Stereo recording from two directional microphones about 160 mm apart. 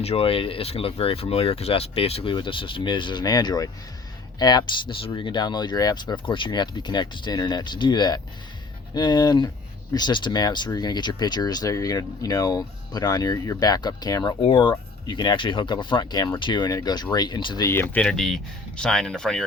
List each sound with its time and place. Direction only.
0.0 s speech: 40° left (ahead or behind)
17.7 s speech: 10° left (ahead or behind)